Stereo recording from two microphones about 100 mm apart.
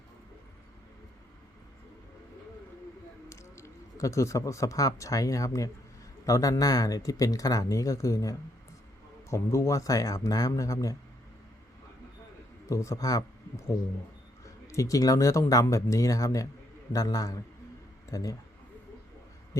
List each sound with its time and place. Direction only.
3.2 s speech: 30° left (ahead or behind)
12.6 s speech: 30° left (ahead or behind)